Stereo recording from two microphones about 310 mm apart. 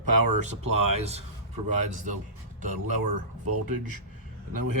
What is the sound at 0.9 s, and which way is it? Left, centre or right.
Speech, centre.